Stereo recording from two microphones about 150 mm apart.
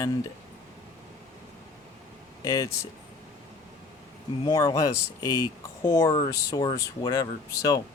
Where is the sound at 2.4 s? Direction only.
20° left (ahead or behind).